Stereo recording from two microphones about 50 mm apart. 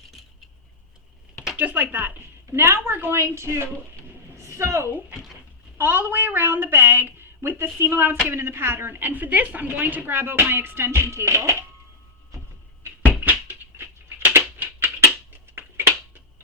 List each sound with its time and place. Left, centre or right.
1.5 s speech: right
2.5 s a woman's voice: right
2.7 s a woman's voice: right
5.7 s a woman's voice: right
13.1 s a sound: right